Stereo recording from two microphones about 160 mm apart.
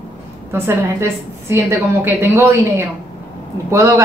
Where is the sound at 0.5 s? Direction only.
15° right (ahead or behind).